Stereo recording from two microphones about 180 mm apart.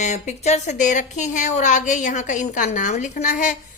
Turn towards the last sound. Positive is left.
turn(degrees=45)  # may be behind; listen again after turning